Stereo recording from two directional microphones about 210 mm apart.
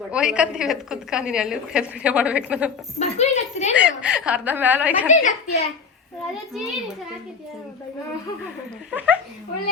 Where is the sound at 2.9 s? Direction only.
35° left (ahead or behind).